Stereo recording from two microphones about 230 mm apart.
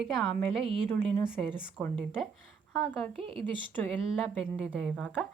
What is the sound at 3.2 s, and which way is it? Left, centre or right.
Speech, right.